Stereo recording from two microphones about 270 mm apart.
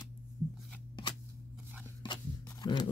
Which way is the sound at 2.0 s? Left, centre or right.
Centre.